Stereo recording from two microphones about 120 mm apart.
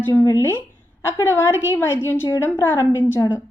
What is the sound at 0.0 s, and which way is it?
Speech, 20° left (ahead or behind).